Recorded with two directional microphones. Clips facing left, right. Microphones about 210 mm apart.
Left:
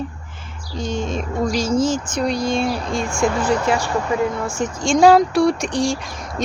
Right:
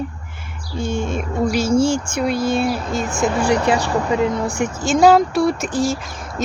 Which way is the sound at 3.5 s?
20° right (ahead or behind).